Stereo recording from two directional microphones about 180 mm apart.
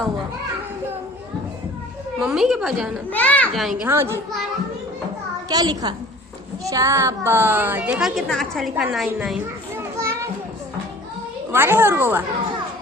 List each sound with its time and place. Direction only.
2.1 s a woman's voice: 5° right (ahead or behind)
3.1 s a child's voice: 10° left (ahead or behind)
3.8 s a woman's voice: 15° right (ahead or behind)
5.5 s a woman's voice: 20° right (ahead or behind); by 9.4 s centre (ahead or behind)
9.7 s children playing: 15° right (ahead or behind)
11.5 s a woman's voice: 10° right (ahead or behind)